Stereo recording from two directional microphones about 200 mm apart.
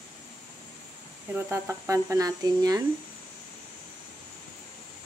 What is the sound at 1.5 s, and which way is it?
Speech, 15° right (ahead or behind).